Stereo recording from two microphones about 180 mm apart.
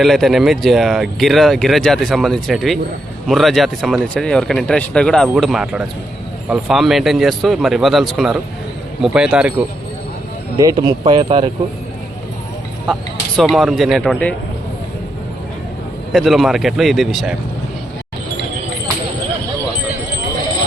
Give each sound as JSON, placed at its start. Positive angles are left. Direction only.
{"t": 0.0, "sound": "speech", "side_deg": 0}
{"t": 10.6, "sound": "speech", "side_deg": -20}
{"t": 12.9, "sound": "speech", "side_deg": 0}
{"t": 16.1, "sound": "speech", "side_deg": 0}